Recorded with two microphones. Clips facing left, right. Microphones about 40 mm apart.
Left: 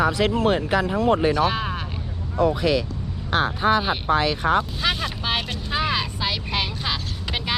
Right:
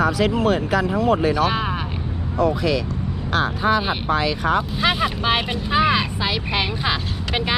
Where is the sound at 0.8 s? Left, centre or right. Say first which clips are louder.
Right 1 dB; right.